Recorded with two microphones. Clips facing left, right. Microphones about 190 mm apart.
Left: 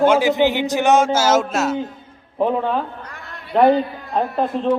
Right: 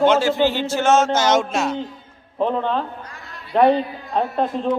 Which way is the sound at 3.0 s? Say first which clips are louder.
Left 2 dB; 60° left (ahead or behind).